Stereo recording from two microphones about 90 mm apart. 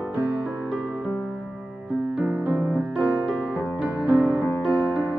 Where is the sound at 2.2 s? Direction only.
15° right (ahead or behind).